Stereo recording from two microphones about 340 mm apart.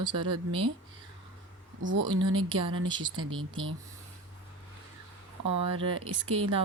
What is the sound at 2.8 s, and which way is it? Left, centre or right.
Speech, centre.